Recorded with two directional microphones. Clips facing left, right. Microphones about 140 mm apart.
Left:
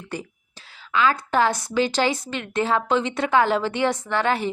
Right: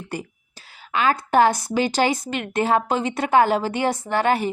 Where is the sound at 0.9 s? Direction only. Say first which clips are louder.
Even; 50° right (ahead or behind).